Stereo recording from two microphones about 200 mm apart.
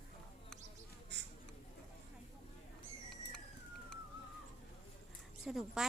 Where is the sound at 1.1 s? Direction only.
60° right (ahead or behind).